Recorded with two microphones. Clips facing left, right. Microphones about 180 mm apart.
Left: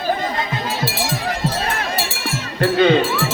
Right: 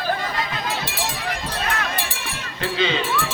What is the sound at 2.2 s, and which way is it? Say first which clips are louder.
Music: left 9 dB; 45° left (ahead or behind).